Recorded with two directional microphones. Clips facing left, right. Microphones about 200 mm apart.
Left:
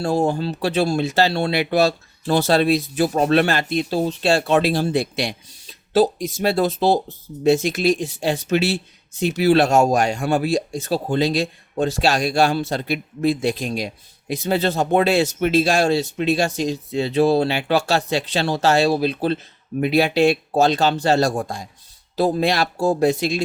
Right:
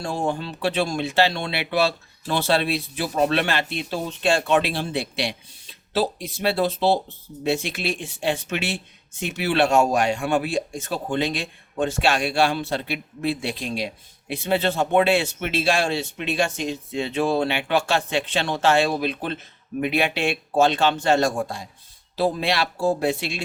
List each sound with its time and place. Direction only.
0.0 s speech: 40° left (ahead or behind)